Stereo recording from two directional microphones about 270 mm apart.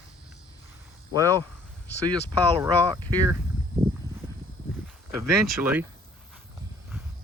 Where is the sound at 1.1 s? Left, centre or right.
Centre.